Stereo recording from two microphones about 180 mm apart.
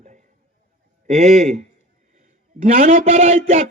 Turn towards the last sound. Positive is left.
turn(degrees=-35)  # may be behind; listen again after turning